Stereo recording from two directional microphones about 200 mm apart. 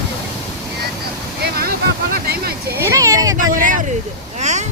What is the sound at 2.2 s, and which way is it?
Speech, 50° right (ahead or behind).